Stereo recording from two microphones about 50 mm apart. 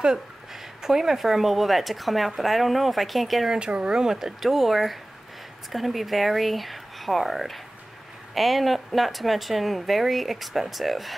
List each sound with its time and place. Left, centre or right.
0.8 s speech: centre
3.4 s speech: right; by 11.1 s centre